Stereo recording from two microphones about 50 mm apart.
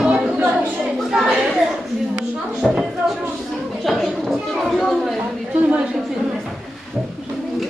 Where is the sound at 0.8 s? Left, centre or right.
Centre.